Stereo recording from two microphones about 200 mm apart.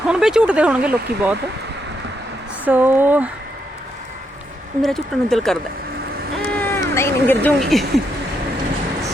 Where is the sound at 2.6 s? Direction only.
10° right (ahead or behind).